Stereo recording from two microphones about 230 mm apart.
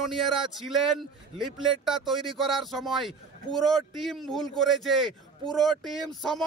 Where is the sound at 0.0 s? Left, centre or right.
Centre.